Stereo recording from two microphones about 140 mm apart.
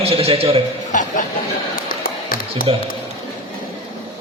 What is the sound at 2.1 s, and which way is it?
Music, 90° left.